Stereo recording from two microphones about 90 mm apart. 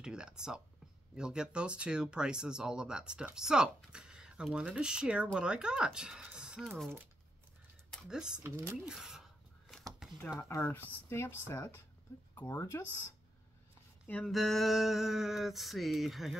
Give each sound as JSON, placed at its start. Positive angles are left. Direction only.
{"t": 0.0, "sound": "speech", "side_deg": -10}
{"t": 8.1, "sound": "speech", "side_deg": -10}
{"t": 8.4, "sound": "speech", "side_deg": -25}
{"t": 8.8, "sound": "a sound", "side_deg": -5}
{"t": 10.6, "sound": "speech", "side_deg": 20}
{"t": 14.0, "sound": "speech", "side_deg": 15}
{"t": 14.3, "sound": "a sound", "side_deg": 5}